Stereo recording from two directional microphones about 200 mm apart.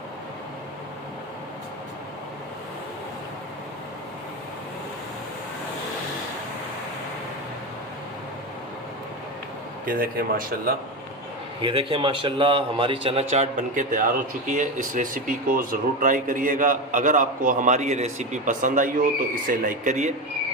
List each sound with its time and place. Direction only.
9.8 s a man's voice: 45° right (ahead or behind)
11.6 s a man's voice: 25° right (ahead or behind)